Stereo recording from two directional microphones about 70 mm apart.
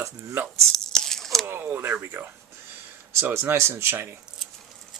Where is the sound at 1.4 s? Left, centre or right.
Right.